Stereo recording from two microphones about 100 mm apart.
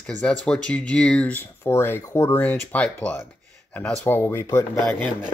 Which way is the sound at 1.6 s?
25° left (ahead or behind).